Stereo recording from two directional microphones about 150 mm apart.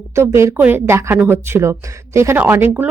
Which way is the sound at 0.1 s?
20° right (ahead or behind).